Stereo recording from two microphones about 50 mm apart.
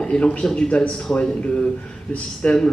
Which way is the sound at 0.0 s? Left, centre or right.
Left.